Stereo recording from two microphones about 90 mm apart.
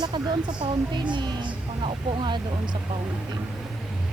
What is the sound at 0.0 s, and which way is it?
Speech, 55° right (ahead or behind).